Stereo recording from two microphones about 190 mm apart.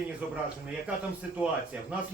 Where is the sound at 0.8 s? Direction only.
5° right (ahead or behind).